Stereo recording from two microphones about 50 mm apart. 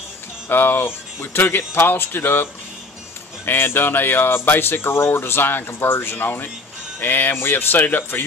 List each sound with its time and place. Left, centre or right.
0.5 s speech: left